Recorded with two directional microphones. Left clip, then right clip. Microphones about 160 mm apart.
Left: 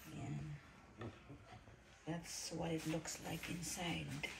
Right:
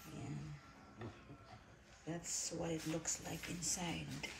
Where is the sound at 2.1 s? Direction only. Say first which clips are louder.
Right 2 dB; 10° right (ahead or behind).